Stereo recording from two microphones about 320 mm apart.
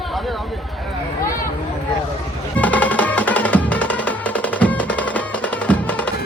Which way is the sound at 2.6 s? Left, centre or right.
Centre.